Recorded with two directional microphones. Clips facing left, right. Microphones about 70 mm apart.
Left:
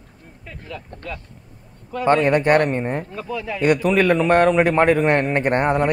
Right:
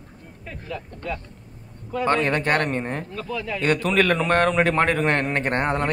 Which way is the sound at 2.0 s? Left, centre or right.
Centre.